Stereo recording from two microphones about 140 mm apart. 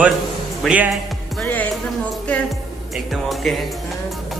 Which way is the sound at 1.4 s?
10° left (ahead or behind).